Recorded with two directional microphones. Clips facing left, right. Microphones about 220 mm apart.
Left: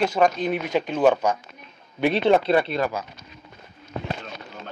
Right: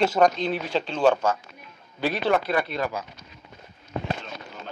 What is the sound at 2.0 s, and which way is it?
Speech, 25° left (ahead or behind).